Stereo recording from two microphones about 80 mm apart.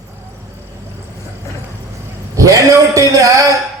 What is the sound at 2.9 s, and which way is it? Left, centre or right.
Speech, right.